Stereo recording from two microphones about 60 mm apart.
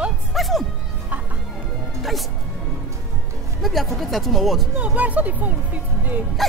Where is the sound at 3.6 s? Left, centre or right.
Centre.